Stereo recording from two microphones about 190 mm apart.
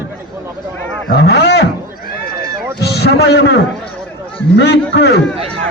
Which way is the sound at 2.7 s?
60° left (ahead or behind).